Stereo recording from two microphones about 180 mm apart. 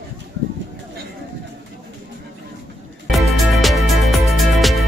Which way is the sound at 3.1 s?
Centre (ahead or behind).